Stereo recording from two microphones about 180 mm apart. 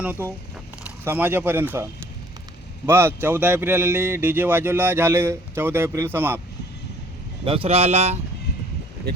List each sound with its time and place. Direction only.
0.0 s speech: 10° right (ahead or behind)
7.4 s speech: 30° right (ahead or behind)